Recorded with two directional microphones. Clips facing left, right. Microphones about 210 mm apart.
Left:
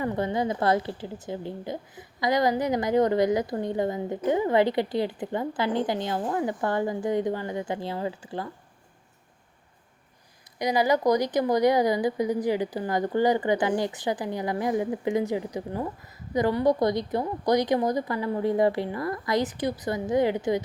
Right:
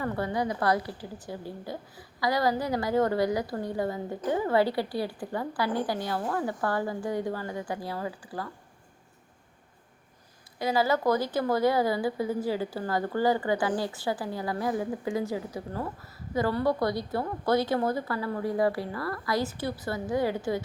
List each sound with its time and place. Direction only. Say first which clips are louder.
0.0 s a woman's voice: left 3 dB; 20° left (ahead or behind)
10.6 s a woman's voice: left 3 dB; 15° left (ahead or behind)